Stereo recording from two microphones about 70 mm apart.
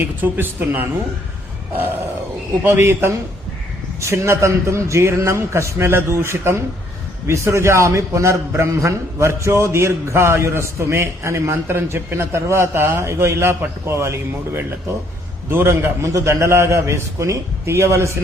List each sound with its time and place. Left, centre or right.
0.0 s speech: right
2.6 s a man's voice: right